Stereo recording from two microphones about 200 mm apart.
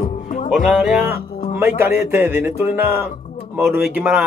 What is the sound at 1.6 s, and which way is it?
A man's voice, 15° right (ahead or behind).